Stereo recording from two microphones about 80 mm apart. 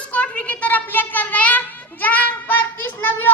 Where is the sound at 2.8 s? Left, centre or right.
Left.